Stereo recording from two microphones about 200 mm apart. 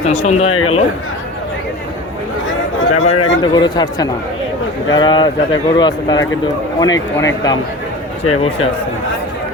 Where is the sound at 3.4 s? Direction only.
20° left (ahead or behind).